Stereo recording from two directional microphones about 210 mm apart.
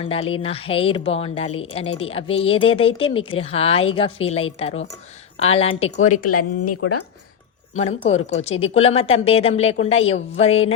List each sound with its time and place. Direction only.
0.0 s a woman's voice: 25° left (ahead or behind)
6.2 s speech: 90° left
8.0 s a woman's voice: 30° left (ahead or behind)